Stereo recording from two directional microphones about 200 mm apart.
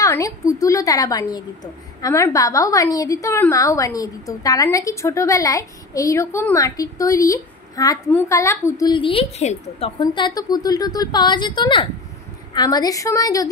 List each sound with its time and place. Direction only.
0.0 s a woman's voice: 15° left (ahead or behind)